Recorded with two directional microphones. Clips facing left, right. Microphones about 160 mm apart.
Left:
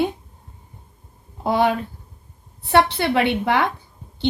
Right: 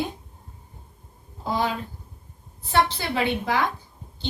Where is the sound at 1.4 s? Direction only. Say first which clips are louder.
Left 7 dB; 65° left (ahead or behind).